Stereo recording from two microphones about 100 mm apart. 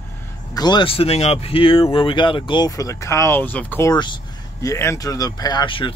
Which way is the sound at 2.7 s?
35° left (ahead or behind).